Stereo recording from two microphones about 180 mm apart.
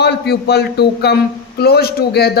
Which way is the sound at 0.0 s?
65° left (ahead or behind).